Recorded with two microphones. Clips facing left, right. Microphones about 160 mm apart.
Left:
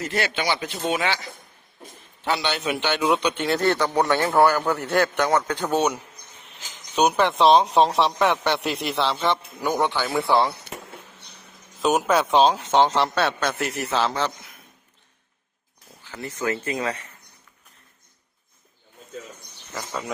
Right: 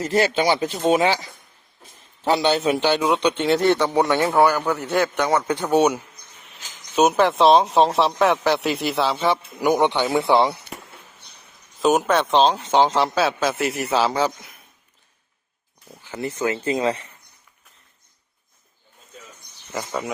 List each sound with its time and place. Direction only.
0.3 s speech: 40° right (ahead or behind)
2.2 s speech: 35° right (ahead or behind); by 3.8 s 20° right (ahead or behind)
3.8 s a man's voice: centre (ahead or behind)
6.4 s speech: centre (ahead or behind); by 10.6 s 20° right (ahead or behind)
11.8 s speech: centre (ahead or behind)
16.1 s speech: 20° right (ahead or behind)